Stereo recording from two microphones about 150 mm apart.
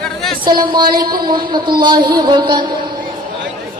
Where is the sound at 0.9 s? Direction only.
80° right.